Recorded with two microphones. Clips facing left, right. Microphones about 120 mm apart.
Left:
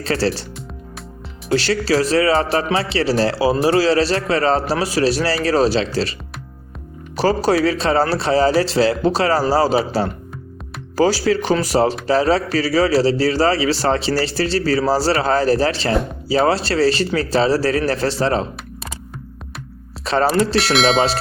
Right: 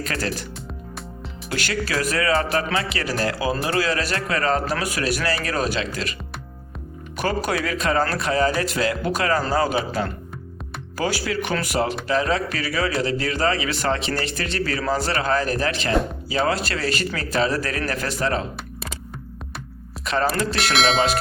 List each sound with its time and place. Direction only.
0.0 s a man's voice: 30° left (ahead or behind)
1.5 s a man's voice: 30° left (ahead or behind)
7.2 s a man's voice: 30° left (ahead or behind)
20.1 s a man's voice: 30° left (ahead or behind)
20.7 s a sound: centre (ahead or behind)